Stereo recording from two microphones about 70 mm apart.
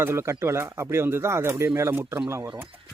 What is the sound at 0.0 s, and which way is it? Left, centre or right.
Speech, right.